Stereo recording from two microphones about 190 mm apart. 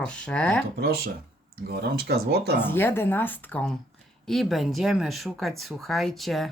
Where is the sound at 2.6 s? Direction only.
10° left (ahead or behind).